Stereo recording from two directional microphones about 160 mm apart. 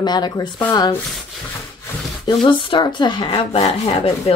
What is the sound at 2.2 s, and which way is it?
Speech, 30° left (ahead or behind).